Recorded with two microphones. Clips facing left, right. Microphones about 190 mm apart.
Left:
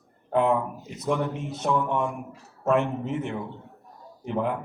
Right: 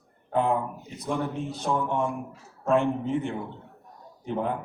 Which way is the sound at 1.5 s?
35° right (ahead or behind).